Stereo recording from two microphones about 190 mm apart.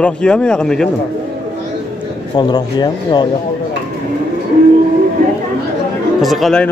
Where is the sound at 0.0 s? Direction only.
5° left (ahead or behind).